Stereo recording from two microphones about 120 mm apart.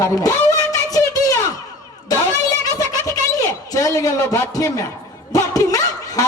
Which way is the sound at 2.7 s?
30° left (ahead or behind).